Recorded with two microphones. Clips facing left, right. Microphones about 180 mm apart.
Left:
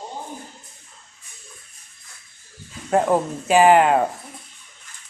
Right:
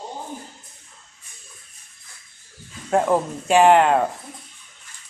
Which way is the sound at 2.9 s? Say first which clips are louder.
Left 1 dB; centre (ahead or behind).